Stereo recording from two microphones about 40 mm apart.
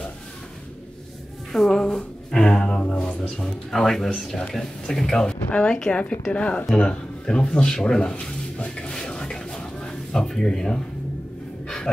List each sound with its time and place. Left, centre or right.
1.5 s a sound: centre
1.9 s music: centre
2.8 s music: left
3.7 s speech: centre
5.5 s speech: left
8.6 s a sound: left